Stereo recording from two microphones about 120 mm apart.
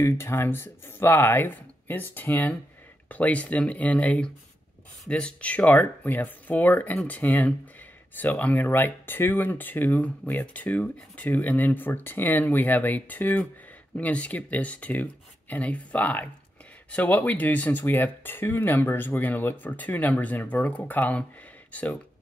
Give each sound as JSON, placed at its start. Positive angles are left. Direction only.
{"t": 0.0, "sound": "speech", "side_deg": 20}